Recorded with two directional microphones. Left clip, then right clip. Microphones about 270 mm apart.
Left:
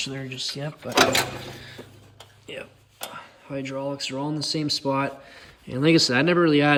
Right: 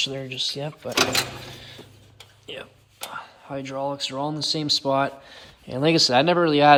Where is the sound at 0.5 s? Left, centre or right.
Centre.